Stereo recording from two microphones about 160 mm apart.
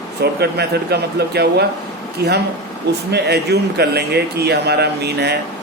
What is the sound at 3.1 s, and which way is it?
Speech, 90° right.